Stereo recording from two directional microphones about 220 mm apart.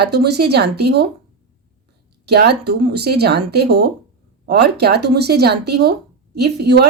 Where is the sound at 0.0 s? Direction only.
45° right (ahead or behind).